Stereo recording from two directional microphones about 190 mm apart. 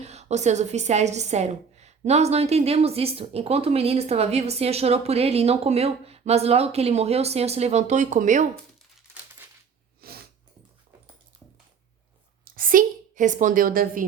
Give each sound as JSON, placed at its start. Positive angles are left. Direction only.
{"t": 0.0, "sound": "a woman's voice", "side_deg": -35}
{"t": 10.0, "sound": "dog", "side_deg": -55}
{"t": 12.5, "sound": "a woman's voice", "side_deg": -45}